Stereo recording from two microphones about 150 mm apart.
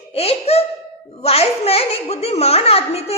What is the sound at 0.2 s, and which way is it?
A woman's voice, 45° left (ahead or behind).